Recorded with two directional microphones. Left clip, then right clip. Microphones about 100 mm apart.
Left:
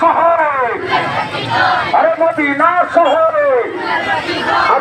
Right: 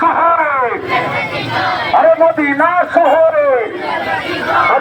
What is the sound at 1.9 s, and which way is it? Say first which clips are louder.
Speech: right 6 dB; 5° right (ahead or behind).